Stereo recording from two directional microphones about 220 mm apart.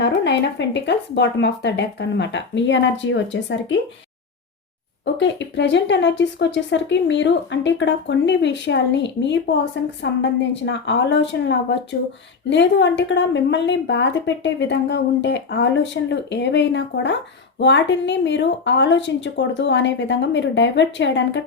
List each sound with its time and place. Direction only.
0.0 s a woman's voice: 50° left (ahead or behind)
5.1 s a woman's voice: 55° left (ahead or behind)